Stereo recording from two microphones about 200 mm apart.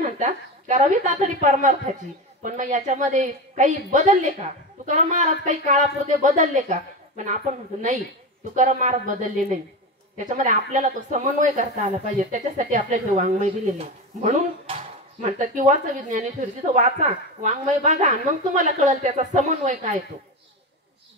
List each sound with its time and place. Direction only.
0.2 s a woman's voice: 35° right (ahead or behind)
8.5 s a woman's voice: 40° right (ahead or behind)